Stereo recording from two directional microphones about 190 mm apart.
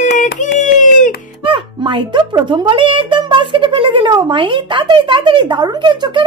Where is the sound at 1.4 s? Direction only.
25° right (ahead or behind).